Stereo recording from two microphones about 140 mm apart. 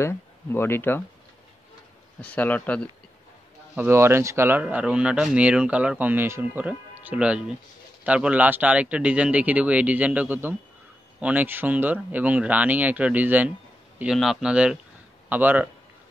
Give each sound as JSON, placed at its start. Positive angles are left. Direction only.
{"t": 0.0, "sound": "speech", "side_deg": 15}
{"t": 2.2, "sound": "speech", "side_deg": 10}
{"t": 3.7, "sound": "speech", "side_deg": -15}
{"t": 14.1, "sound": "speech", "side_deg": 0}